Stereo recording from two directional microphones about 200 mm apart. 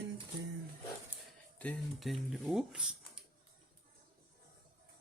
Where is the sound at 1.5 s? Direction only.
5° left (ahead or behind).